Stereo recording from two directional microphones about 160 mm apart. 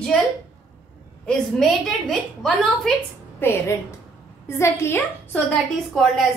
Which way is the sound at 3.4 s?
15° left (ahead or behind).